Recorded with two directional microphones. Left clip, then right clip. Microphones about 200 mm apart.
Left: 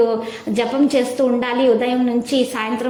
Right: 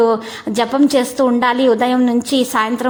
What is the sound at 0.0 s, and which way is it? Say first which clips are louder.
A woman's voice: right 3 dB; 40° right (ahead or behind).